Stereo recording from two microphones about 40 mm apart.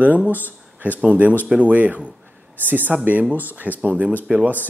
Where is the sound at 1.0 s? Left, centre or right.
Right.